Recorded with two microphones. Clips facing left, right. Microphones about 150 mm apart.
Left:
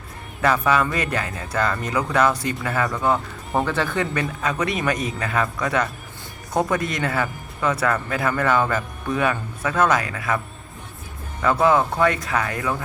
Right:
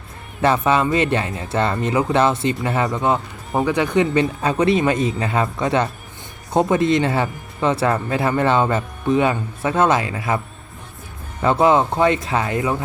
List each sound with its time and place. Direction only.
0.4 s speech: 25° right (ahead or behind)
11.4 s speech: 25° right (ahead or behind)